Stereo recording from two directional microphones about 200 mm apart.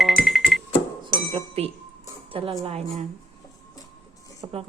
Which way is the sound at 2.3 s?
25° right (ahead or behind).